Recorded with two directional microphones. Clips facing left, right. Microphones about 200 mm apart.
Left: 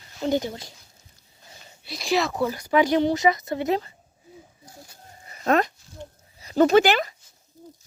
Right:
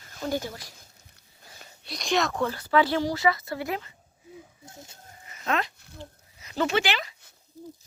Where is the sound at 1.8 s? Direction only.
Centre (ahead or behind); by 3.8 s 20° left (ahead or behind).